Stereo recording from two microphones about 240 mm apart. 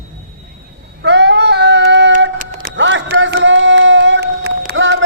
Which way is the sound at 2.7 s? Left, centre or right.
Right.